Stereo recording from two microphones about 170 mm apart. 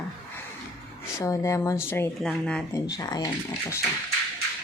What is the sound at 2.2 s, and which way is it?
Speech, 5° left (ahead or behind).